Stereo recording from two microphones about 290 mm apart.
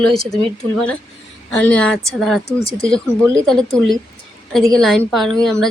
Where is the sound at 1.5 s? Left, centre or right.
Centre.